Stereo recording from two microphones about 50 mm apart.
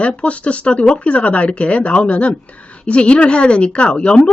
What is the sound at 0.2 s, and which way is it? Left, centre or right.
A woman's voice, left.